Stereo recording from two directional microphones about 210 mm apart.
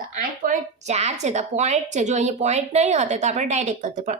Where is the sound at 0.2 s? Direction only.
35° right (ahead or behind).